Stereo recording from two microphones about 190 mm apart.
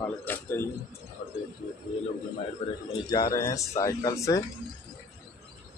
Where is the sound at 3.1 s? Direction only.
20° left (ahead or behind).